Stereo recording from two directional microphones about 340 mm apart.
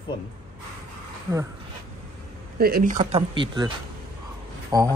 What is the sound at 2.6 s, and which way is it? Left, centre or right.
Speech, right.